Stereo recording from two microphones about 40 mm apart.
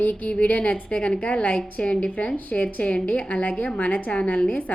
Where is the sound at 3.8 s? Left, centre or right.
Left.